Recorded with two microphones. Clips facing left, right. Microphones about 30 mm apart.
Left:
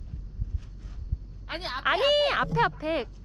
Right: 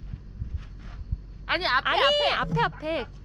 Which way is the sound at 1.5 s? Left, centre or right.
Right.